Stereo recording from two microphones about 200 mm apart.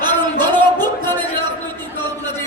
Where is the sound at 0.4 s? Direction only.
10° left (ahead or behind).